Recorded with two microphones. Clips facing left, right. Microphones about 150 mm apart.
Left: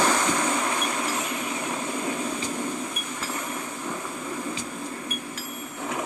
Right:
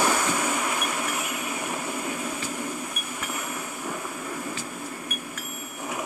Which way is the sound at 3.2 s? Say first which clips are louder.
Even; 10° right (ahead or behind).